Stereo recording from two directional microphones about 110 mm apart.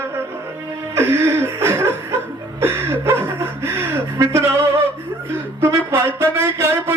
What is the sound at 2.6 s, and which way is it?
Chuckle, 20° right (ahead or behind).